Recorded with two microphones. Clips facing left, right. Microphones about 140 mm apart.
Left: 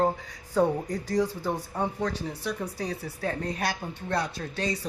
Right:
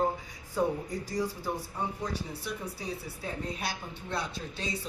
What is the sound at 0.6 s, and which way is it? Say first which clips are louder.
A woman's voice: left 5 dB; 90° left.